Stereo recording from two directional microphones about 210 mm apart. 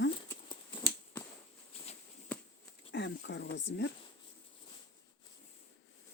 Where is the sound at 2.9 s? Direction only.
60° left (ahead or behind).